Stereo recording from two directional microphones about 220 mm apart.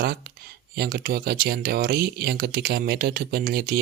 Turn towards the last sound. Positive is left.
turn(degrees=-45)  # may be behind; listen again after turning